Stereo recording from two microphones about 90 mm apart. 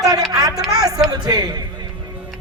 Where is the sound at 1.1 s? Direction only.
45° right (ahead or behind).